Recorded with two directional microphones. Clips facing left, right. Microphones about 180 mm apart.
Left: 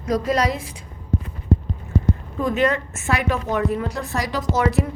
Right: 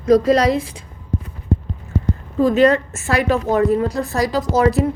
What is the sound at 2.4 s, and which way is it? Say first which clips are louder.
A woman's voice: right 7 dB; 35° right (ahead or behind).